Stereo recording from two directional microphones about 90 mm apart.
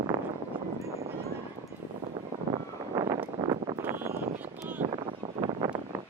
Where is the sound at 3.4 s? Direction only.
60° right (ahead or behind).